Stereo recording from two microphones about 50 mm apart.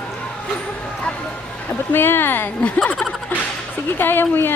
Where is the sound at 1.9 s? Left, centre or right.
Left.